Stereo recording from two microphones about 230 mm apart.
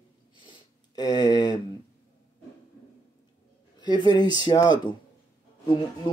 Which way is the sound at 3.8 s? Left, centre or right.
Centre.